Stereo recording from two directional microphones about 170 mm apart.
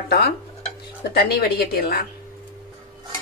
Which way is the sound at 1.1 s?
65° left (ahead or behind).